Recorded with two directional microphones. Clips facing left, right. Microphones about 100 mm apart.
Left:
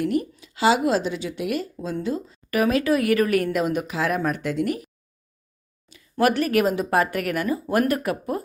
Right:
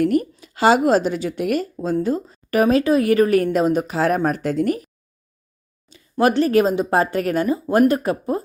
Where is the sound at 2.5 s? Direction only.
30° right (ahead or behind).